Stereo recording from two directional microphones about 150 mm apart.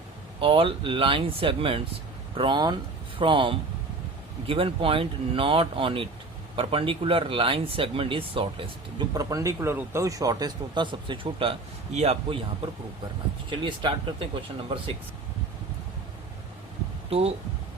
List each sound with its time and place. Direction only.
0.3 s speech: 35° right (ahead or behind)
9.1 s speech: 20° right (ahead or behind); by 12.4 s 45° right (ahead or behind)
13.5 s speech: 30° right (ahead or behind)
17.1 s speech: 45° right (ahead or behind)